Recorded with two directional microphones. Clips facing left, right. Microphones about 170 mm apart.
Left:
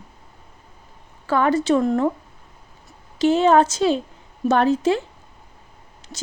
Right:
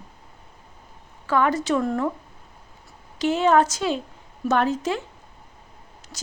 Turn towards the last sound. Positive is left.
turn(degrees=25)  # may be behind; listen again after turning